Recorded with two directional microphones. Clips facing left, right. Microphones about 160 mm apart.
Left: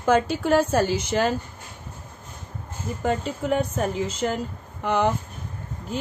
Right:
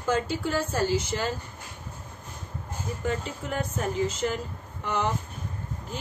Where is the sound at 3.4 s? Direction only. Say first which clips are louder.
Left 7 dB; 65° left (ahead or behind).